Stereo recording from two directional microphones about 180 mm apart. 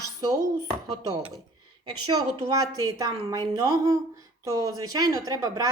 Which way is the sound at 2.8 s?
20° right (ahead or behind).